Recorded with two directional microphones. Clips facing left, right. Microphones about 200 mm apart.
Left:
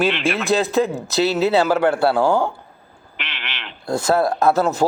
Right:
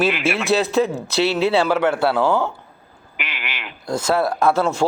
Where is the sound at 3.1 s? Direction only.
10° right (ahead or behind).